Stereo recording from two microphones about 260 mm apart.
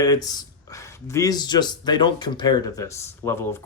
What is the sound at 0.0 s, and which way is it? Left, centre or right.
Speech, centre.